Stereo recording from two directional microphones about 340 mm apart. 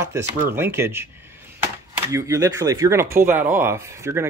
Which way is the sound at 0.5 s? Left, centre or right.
Centre.